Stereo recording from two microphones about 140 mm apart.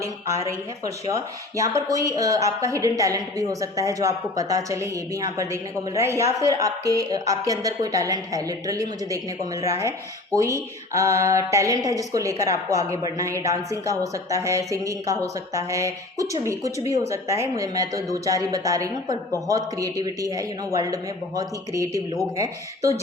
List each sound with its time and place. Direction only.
0.9 s speech: 25° right (ahead or behind)